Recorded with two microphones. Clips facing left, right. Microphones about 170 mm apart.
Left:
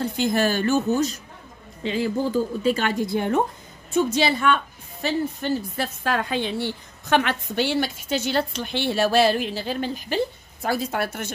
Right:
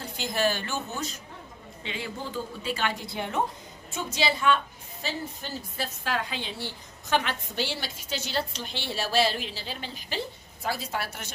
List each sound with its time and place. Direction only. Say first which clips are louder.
0.2 s a man's voice: left 5 dB; 50° left (ahead or behind)
4.1 s a woman's voice: left 4 dB; 60° left (ahead or behind)